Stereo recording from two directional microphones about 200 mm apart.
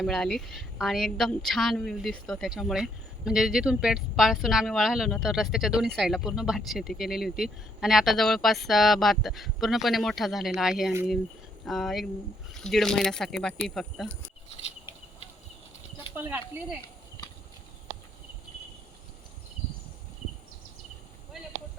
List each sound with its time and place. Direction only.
0.0 s a woman's voice: 5° left (ahead or behind)
16.1 s speech: 10° right (ahead or behind)